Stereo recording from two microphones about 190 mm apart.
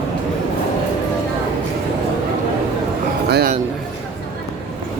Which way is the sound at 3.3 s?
50° right (ahead or behind).